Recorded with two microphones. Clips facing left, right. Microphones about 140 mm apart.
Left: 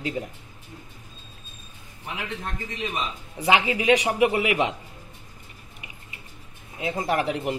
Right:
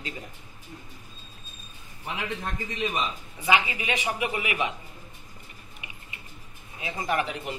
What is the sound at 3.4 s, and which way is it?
A man's voice, 85° left.